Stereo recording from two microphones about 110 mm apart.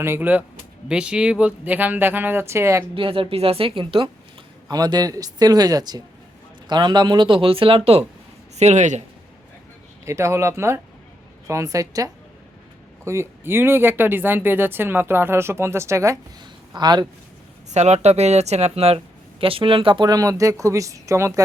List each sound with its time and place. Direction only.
0.0 s speech: 20° right (ahead or behind)
2.9 s a woman's voice: 55° right (ahead or behind)
4.7 s speech: 35° right (ahead or behind); by 8.0 s 60° right (ahead or behind)
8.5 s speech: 90° right
10.1 s speech: 25° right (ahead or behind)
16.4 s a sound: 40° right (ahead or behind)
17.7 s speech: 90° right; by 21.4 s 25° right (ahead or behind)